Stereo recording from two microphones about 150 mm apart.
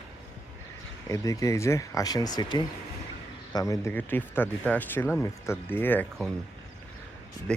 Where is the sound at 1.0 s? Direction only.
20° left (ahead or behind).